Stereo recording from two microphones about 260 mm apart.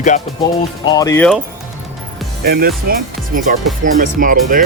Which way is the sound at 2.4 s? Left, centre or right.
Right.